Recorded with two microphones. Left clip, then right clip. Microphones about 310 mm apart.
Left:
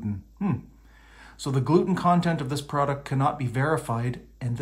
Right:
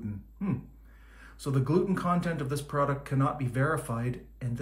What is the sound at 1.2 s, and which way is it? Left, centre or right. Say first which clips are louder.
Speech: left 3 dB; centre.